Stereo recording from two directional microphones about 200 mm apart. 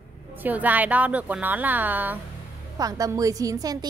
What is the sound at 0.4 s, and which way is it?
A woman's voice, 10° right (ahead or behind).